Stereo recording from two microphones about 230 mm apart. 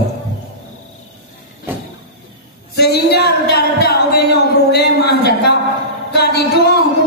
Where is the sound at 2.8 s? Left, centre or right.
Left.